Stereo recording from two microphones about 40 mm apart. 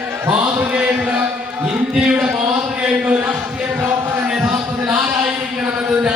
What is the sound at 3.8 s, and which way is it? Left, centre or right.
Music, right.